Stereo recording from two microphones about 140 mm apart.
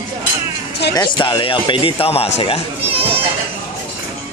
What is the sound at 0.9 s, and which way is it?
A man's voice, 35° left (ahead or behind).